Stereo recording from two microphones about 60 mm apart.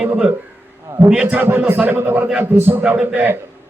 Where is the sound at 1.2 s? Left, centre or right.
Right.